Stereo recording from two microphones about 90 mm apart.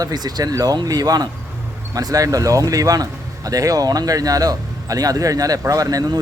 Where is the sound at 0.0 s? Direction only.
50° right (ahead or behind).